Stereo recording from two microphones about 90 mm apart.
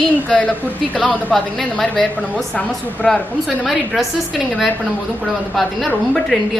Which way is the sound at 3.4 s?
Centre (ahead or behind).